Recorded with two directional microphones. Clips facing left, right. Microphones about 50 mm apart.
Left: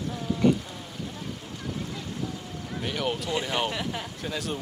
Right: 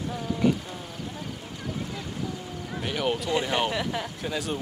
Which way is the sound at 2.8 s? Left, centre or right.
Centre.